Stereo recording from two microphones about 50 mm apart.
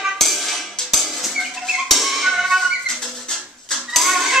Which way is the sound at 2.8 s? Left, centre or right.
Centre.